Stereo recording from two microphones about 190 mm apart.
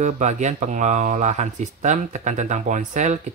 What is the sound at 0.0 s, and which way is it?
Speech, 40° right (ahead or behind).